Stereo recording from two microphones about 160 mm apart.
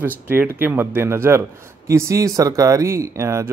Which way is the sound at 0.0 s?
15° right (ahead or behind).